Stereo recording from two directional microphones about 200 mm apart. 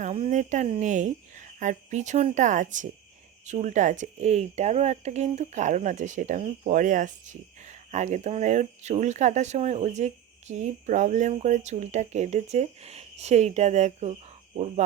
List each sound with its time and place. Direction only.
0.0 s speech: 35° right (ahead or behind)